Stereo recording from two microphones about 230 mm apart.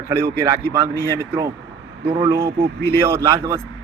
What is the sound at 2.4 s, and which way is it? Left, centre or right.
Speech, right.